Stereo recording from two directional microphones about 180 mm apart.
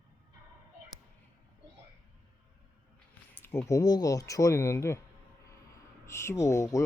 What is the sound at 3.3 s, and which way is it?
Speech, 10° left (ahead or behind).